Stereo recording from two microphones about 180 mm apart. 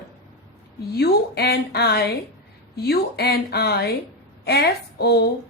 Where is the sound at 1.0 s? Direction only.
65° left (ahead or behind).